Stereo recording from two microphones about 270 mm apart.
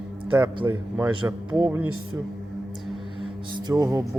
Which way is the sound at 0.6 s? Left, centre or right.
Centre.